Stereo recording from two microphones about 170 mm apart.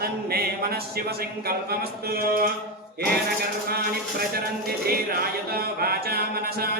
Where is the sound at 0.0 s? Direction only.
65° right (ahead or behind).